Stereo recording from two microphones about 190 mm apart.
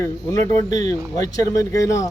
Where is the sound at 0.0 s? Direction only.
15° left (ahead or behind).